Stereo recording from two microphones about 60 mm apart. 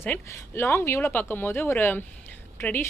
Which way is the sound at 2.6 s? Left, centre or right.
Left.